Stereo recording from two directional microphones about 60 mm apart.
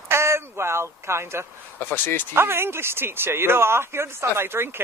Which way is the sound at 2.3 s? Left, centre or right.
Right.